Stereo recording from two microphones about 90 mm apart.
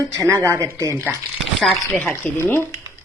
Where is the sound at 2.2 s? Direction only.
20° left (ahead or behind).